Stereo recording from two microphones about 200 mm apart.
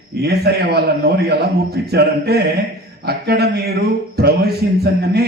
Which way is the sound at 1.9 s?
55° right (ahead or behind).